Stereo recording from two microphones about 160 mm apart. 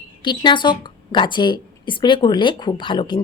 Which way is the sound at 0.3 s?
30° left (ahead or behind).